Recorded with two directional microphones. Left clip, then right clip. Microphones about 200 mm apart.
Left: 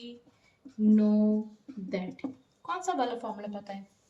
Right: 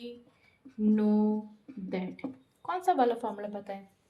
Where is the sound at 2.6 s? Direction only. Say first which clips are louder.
Right 4 dB; 50° right (ahead or behind).